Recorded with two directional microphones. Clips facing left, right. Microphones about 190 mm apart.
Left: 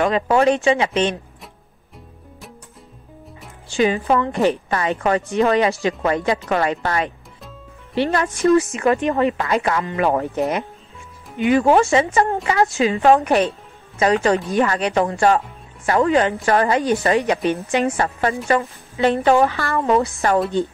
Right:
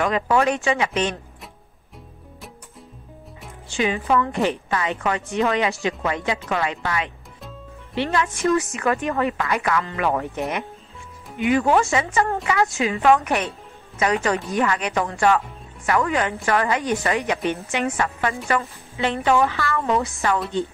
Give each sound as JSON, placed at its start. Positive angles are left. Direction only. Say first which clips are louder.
{"t": 0.0, "sound": "speech", "louder": "left 4 dB", "side_deg": 30}
{"t": 3.7, "sound": "a woman's voice", "louder": "left 3 dB", "side_deg": 35}
{"t": 9.0, "sound": "speech", "louder": "left 4 dB", "side_deg": 20}
{"t": 11.3, "sound": "a woman's voice", "louder": "left 4 dB", "side_deg": 30}
{"t": 18.9, "sound": "a woman's voice", "louder": "left 5 dB", "side_deg": 45}